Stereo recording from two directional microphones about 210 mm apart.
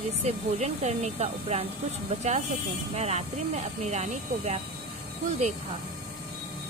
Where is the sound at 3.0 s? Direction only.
30° right (ahead or behind).